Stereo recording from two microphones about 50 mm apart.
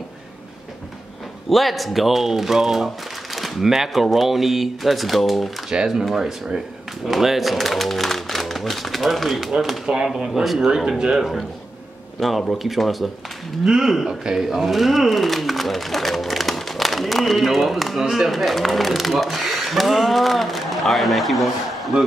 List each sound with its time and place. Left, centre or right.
1.5 s speech: centre
5.7 s speech: centre
9.5 s speech: centre
11.0 s speech: centre
12.2 s speech: centre
18.3 s speech: centre